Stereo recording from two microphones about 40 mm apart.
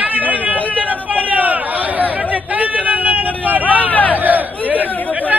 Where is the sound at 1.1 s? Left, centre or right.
Right.